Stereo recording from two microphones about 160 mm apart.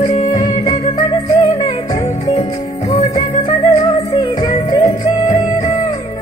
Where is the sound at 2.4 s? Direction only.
40° left (ahead or behind).